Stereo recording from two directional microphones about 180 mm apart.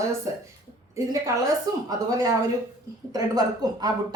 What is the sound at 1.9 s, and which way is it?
A woman's voice, 20° right (ahead or behind).